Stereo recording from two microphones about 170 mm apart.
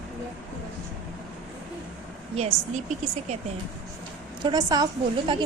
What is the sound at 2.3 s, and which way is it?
Speech, 40° right (ahead or behind).